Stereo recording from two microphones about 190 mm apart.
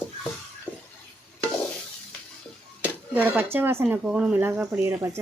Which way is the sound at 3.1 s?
10° right (ahead or behind).